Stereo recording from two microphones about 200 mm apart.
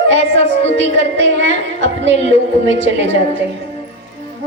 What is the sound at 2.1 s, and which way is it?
Speech, 30° left (ahead or behind).